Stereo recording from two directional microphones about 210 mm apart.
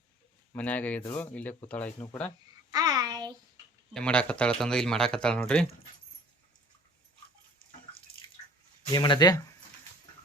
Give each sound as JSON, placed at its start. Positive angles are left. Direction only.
{"t": 0.5, "sound": "speech", "side_deg": 5}
{"t": 2.7, "sound": "a sound", "side_deg": -20}
{"t": 3.9, "sound": "speech", "side_deg": 5}
{"t": 8.9, "sound": "speech", "side_deg": 20}